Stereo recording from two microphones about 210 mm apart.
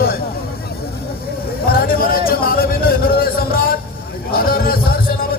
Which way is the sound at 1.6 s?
45° left (ahead or behind).